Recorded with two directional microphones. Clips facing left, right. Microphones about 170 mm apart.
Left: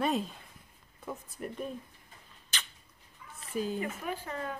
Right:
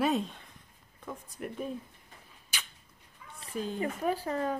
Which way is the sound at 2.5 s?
10° right (ahead or behind).